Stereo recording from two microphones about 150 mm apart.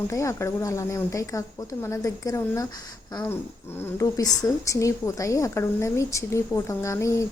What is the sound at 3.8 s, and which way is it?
A woman's voice, 20° left (ahead or behind).